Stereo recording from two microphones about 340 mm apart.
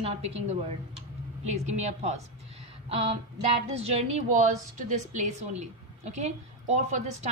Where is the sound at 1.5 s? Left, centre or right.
Centre.